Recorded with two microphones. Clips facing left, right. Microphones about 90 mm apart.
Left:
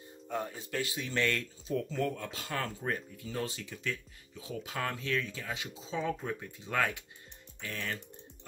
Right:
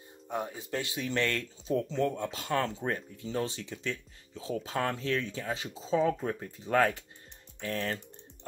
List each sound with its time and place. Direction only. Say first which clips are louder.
0.3 s speech: right 2 dB; 15° right (ahead or behind); by 8.0 s 35° right (ahead or behind)